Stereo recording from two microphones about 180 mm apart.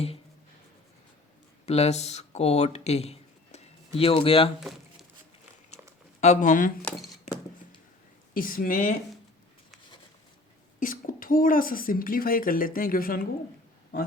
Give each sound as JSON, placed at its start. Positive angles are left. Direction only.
{"t": 1.6, "sound": "speech", "side_deg": 35}
{"t": 5.8, "sound": "a sound", "side_deg": -10}
{"t": 6.1, "sound": "speech", "side_deg": 40}
{"t": 8.3, "sound": "speech", "side_deg": 50}
{"t": 10.8, "sound": "speech", "side_deg": 50}